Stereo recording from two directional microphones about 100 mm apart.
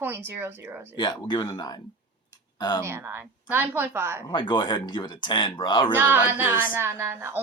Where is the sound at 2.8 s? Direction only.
25° right (ahead or behind).